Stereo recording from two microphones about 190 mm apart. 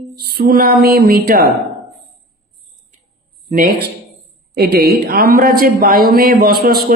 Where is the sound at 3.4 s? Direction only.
45° right (ahead or behind).